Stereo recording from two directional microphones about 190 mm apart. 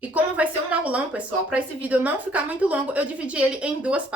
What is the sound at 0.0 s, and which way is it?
A woman's voice, 10° right (ahead or behind).